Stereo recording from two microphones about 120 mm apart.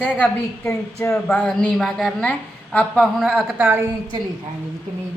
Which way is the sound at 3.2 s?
5° right (ahead or behind).